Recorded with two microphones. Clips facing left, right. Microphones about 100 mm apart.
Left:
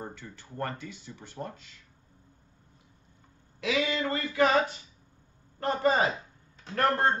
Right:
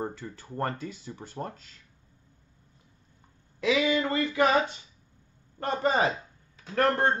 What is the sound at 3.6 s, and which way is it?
Speech, 25° right (ahead or behind).